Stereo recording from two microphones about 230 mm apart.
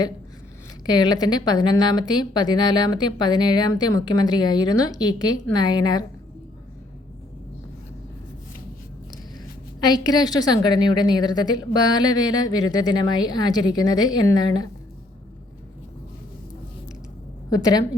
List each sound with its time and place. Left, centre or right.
0.9 s a woman's voice: centre
9.8 s a woman's voice: centre
17.5 s a woman's voice: centre